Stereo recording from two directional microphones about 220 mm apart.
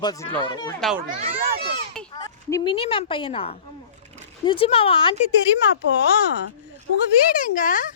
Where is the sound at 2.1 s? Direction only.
15° left (ahead or behind).